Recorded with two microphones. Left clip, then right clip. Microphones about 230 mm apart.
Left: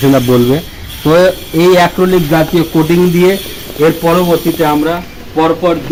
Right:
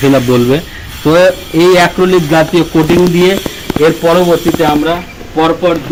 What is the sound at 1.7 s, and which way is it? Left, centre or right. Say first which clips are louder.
Speech: right 1 dB; centre.